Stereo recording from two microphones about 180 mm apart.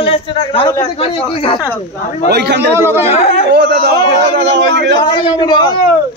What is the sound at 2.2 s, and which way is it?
Speech, 65° right (ahead or behind).